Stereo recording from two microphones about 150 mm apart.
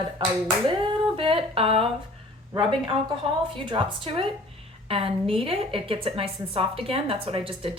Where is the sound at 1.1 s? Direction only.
35° right (ahead or behind).